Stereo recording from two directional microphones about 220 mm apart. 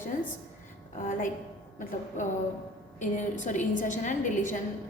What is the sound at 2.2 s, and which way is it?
A woman's voice, 35° left (ahead or behind).